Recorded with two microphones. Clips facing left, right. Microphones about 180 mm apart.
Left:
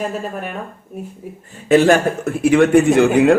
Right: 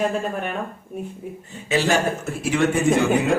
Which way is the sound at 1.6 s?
55° left (ahead or behind).